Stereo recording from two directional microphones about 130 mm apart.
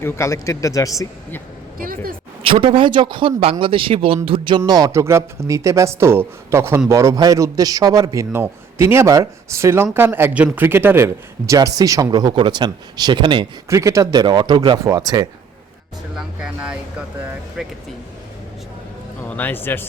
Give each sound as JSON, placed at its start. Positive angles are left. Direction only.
{"t": 0.0, "sound": "speech", "side_deg": 20}
{"t": 1.8, "sound": "a sound", "side_deg": -90}
{"t": 2.5, "sound": "speech", "side_deg": -40}
{"t": 13.7, "sound": "speech", "side_deg": -25}
{"t": 16.1, "sound": "speech", "side_deg": -5}
{"t": 19.3, "sound": "speech", "side_deg": 15}